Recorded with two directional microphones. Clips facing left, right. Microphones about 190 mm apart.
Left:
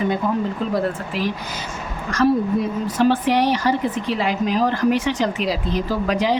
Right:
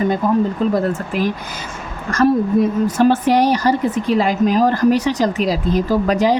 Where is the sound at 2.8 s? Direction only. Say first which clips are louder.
Right 4 dB; 45° right (ahead or behind).